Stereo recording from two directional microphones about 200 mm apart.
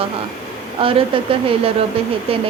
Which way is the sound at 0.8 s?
25° right (ahead or behind).